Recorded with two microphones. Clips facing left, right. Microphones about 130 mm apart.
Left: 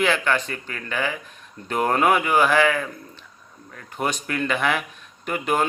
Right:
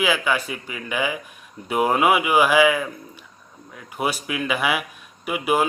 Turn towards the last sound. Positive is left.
turn(degrees=-5)  # may be behind; listen again after turning